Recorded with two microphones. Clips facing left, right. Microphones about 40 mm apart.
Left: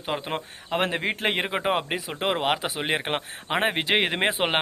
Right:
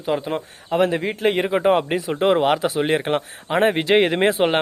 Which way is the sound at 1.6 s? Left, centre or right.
Centre.